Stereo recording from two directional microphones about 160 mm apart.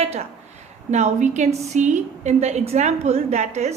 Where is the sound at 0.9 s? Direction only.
45° right (ahead or behind).